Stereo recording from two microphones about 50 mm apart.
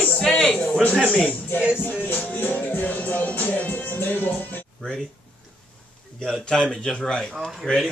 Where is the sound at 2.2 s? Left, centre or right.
Left.